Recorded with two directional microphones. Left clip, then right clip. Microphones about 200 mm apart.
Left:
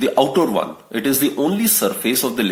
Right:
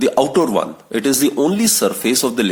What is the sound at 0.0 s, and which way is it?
Speech, 40° right (ahead or behind).